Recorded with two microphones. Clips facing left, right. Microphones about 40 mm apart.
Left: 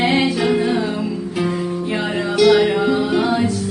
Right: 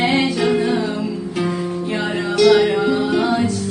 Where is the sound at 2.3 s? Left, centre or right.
Centre.